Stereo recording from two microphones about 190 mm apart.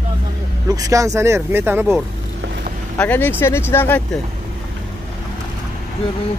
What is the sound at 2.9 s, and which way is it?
Speech, 10° left (ahead or behind).